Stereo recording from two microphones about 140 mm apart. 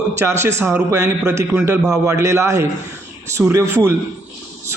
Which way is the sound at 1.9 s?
20° right (ahead or behind).